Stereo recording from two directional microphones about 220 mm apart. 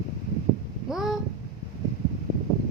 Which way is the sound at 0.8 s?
Centre (ahead or behind).